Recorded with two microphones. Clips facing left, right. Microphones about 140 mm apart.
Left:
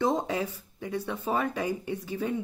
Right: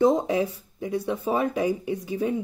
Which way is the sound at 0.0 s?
15° right (ahead or behind).